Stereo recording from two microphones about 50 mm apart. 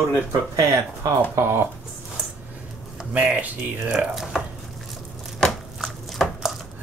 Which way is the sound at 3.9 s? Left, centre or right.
Centre.